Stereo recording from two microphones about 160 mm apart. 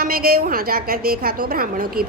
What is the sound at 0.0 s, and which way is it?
A woman's voice, 70° right (ahead or behind).